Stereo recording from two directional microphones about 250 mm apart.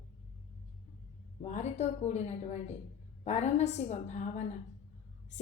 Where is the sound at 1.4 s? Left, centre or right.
Left.